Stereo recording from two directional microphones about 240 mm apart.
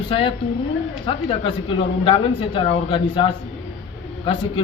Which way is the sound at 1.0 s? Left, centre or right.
Left.